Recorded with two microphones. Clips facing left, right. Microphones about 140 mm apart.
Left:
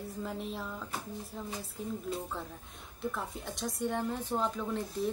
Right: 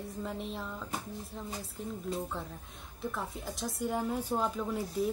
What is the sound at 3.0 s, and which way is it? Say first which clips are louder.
A woman's voice: even; centre (ahead or behind).